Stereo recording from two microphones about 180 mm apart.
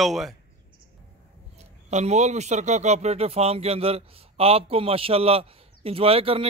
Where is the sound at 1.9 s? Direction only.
40° right (ahead or behind).